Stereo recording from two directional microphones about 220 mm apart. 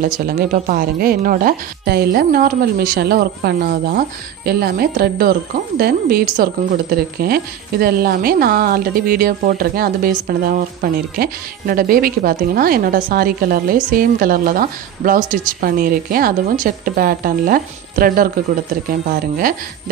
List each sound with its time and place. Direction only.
0.0 s speech: 40° right (ahead or behind)